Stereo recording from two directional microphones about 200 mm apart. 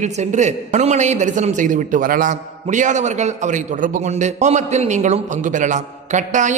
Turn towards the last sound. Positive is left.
turn(degrees=-40)  # may be behind; listen again after turning